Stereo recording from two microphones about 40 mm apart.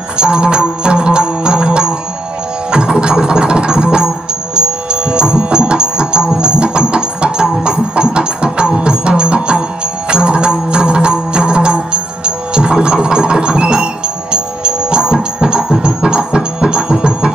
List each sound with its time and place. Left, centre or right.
0.2 s music: right